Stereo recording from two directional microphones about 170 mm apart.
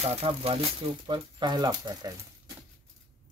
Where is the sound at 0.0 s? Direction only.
35° right (ahead or behind).